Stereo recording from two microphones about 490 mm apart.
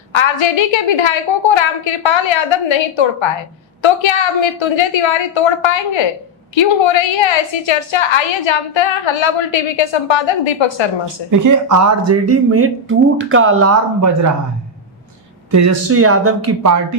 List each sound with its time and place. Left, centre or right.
0.1 s a woman's voice: left
11.3 s speech: right
15.5 s speech: right